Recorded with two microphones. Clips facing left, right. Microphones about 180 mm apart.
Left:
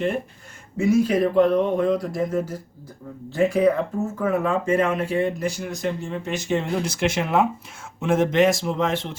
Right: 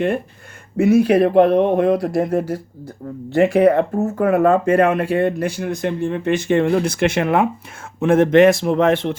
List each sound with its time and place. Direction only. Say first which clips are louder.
0.8 s speech: right 6 dB; 65° right (ahead or behind)